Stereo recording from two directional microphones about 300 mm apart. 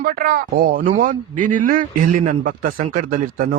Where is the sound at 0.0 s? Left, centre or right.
Right.